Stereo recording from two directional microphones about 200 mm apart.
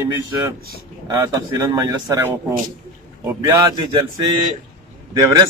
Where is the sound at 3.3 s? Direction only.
15° right (ahead or behind).